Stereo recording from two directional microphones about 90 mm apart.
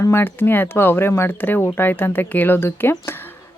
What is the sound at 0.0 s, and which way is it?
Speech, 25° left (ahead or behind).